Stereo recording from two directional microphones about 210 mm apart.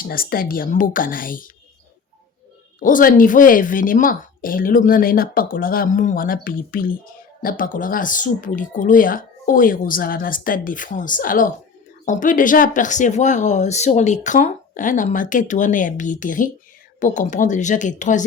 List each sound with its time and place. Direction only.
0.0 s speech: 45° left (ahead or behind)
2.8 s speech: 40° left (ahead or behind)